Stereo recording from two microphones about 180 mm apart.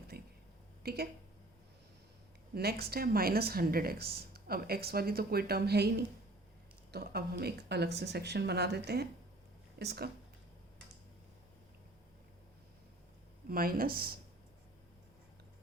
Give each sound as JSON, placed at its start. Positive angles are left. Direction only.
{"t": 0.1, "sound": "a sound", "side_deg": -55}
{"t": 0.8, "sound": "speech", "side_deg": -60}
{"t": 2.6, "sound": "speech", "side_deg": -60}
{"t": 6.9, "sound": "speech", "side_deg": -60}
{"t": 13.5, "sound": "speech", "side_deg": -55}